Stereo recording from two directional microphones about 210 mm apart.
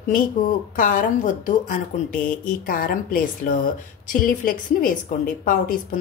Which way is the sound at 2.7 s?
40° left (ahead or behind).